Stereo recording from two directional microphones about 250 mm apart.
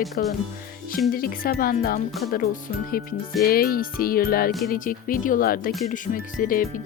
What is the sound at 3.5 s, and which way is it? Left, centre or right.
Music, left.